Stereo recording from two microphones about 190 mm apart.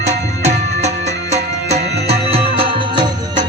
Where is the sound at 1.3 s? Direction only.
35° right (ahead or behind).